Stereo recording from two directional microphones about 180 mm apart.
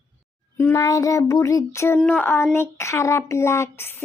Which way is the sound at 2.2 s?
15° left (ahead or behind).